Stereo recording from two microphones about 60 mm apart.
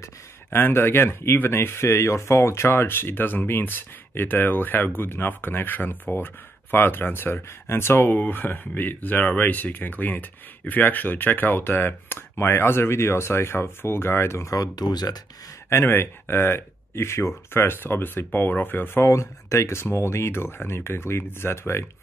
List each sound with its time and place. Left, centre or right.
0.5 s speech: left
14.5 s speech: left
15.7 s speech: left
19.0 s speech: left